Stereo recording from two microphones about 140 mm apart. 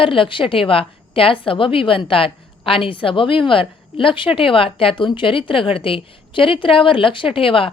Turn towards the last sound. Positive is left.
turn(degrees=40)  # may be behind; listen again after turning